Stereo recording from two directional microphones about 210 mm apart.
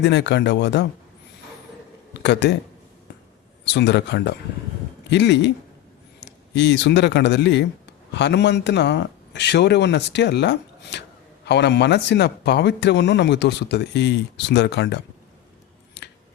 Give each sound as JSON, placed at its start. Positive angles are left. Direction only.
{"t": 0.0, "sound": "speech", "side_deg": 55}
{"t": 2.2, "sound": "speech", "side_deg": 55}
{"t": 3.6, "sound": "speech", "side_deg": 55}
{"t": 16.0, "sound": "scissors", "side_deg": 55}